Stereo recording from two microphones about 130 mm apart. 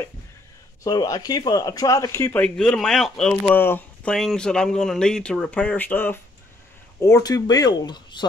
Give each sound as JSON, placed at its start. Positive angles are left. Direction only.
{"t": 0.8, "sound": "speech", "side_deg": 25}
{"t": 2.4, "sound": "speech", "side_deg": 5}
{"t": 3.5, "sound": "speech", "side_deg": 15}
{"t": 4.1, "sound": "speech", "side_deg": 0}